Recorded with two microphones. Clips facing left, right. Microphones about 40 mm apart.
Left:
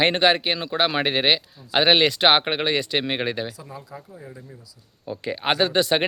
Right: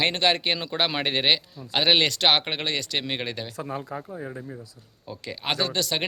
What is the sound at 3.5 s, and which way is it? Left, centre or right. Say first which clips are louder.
Speech: right 6 dB; right.